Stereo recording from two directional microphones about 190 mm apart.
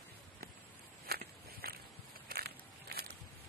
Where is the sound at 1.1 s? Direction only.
55° right (ahead or behind).